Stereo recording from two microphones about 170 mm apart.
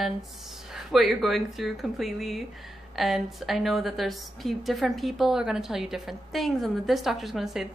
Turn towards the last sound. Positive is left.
turn(degrees=0)  # may be behind; listen again after turning